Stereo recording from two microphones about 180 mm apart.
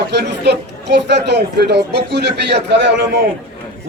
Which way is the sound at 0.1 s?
70° right (ahead or behind).